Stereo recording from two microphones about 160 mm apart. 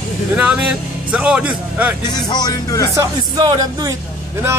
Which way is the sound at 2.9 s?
25° right (ahead or behind).